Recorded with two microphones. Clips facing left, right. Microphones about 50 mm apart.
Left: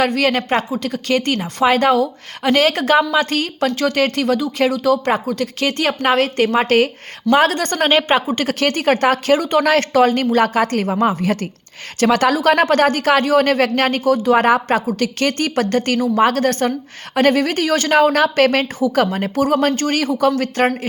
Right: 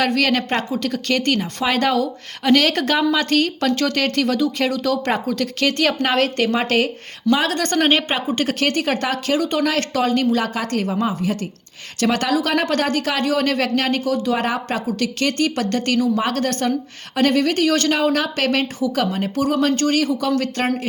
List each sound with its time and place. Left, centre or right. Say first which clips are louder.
0.1 s speech: left 2 dB; centre
1.6 s a woman's voice: left 6 dB; left
17.9 s a woman's voice: left 6 dB; left
20.0 s a woman's voice: left 3 dB; left